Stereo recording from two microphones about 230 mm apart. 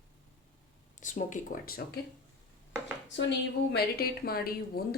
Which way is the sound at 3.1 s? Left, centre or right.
Left.